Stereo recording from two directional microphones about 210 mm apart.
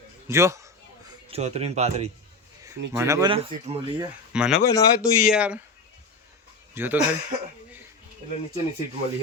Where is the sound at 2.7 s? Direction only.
15° right (ahead or behind).